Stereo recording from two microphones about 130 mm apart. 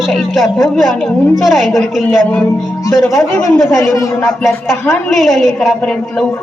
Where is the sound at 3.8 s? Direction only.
20° left (ahead or behind).